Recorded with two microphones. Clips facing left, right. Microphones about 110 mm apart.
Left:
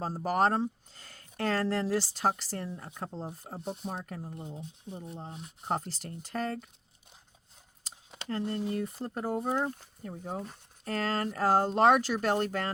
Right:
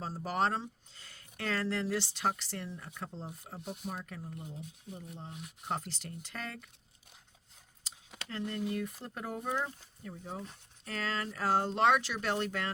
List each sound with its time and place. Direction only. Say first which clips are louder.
0.0 s speech: left 5 dB; 45° left (ahead or behind)
8.1 s speech: left 5 dB; 35° left (ahead or behind)
9.6 s speech: left 5 dB; 40° left (ahead or behind)